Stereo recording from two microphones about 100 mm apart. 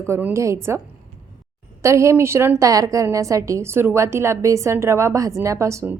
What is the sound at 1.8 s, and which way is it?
A woman's voice, 30° right (ahead or behind).